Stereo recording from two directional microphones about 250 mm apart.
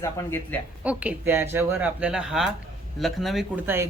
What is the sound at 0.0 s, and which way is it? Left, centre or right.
Speech, centre.